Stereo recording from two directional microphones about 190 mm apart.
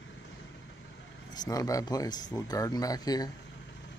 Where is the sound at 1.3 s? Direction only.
20° left (ahead or behind).